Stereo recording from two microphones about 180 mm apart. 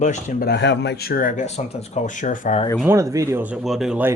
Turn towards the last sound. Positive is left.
turn(degrees=-5)  # may be behind; listen again after turning